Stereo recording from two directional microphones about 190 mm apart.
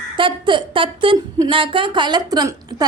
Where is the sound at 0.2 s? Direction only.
25° right (ahead or behind).